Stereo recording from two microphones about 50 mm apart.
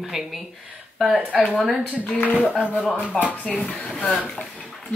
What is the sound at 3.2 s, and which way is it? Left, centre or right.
Speech, left.